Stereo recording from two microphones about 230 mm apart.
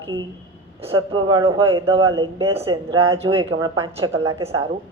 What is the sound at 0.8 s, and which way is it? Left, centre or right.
Speech, right.